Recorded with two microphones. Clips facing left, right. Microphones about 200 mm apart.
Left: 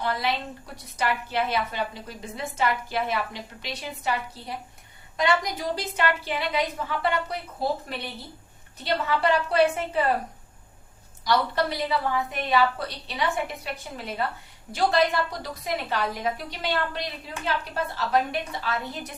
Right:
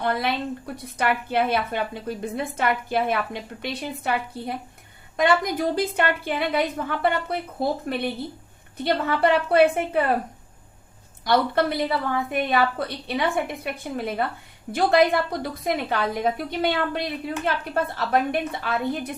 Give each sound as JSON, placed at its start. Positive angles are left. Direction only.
{"t": 0.0, "sound": "a woman's voice", "side_deg": -55}
{"t": 11.3, "sound": "a woman's voice", "side_deg": -55}